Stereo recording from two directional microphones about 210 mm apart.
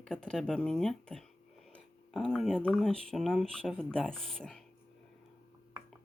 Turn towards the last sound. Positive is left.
turn(degrees=0)  # may be behind; listen again after turning